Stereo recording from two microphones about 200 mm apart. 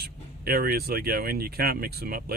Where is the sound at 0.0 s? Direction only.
50° right (ahead or behind).